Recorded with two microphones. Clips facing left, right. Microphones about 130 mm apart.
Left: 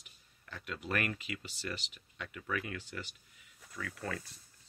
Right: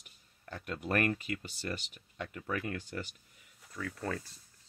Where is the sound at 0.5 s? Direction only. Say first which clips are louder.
Right 4 dB; 45° right (ahead or behind).